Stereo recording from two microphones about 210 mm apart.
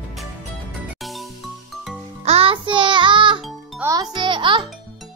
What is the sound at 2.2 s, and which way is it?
Music, 30° right (ahead or behind).